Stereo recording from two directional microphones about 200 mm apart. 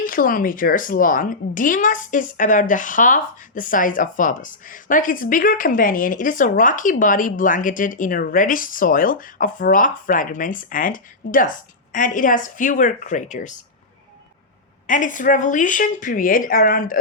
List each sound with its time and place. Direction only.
0.0 s a woman's voice: 45° left (ahead or behind)
14.8 s a woman's voice: 40° left (ahead or behind)